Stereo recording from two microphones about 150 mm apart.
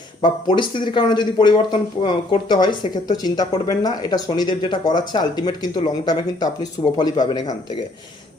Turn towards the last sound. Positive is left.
turn(degrees=30)  # may be behind; listen again after turning